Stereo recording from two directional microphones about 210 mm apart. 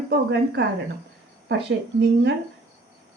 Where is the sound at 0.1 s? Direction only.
50° right (ahead or behind).